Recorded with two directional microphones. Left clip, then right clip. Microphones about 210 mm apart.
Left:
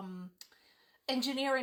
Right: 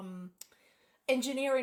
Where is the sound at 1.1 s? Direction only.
25° left (ahead or behind).